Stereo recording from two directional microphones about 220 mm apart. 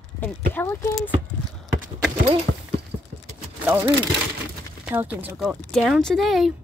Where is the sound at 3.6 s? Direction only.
10° right (ahead or behind).